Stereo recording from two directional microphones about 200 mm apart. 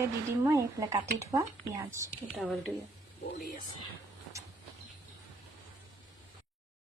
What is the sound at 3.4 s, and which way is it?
Speech, 45° left (ahead or behind).